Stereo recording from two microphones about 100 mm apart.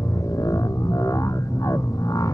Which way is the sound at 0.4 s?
40° left (ahead or behind).